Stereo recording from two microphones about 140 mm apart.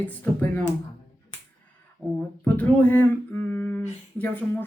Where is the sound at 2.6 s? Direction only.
10° left (ahead or behind).